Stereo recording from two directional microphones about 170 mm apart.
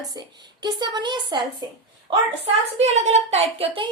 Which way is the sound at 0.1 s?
25° right (ahead or behind).